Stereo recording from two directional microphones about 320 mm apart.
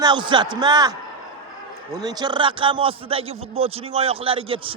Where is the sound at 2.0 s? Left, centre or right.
Centre.